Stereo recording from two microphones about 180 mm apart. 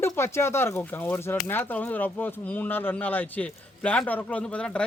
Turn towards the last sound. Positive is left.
turn(degrees=5)  # may be behind; listen again after turning